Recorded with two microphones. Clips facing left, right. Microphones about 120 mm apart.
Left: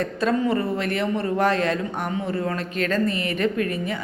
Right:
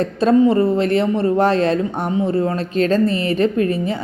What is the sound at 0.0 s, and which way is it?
A woman's voice, 30° right (ahead or behind).